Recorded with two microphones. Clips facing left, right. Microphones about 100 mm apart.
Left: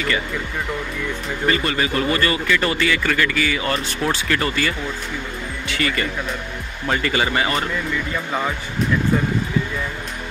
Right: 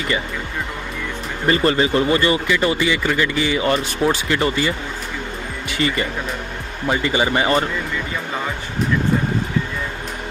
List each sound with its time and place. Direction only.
1.5 s speech: 30° right (ahead or behind)
5.8 s speech: 25° right (ahead or behind)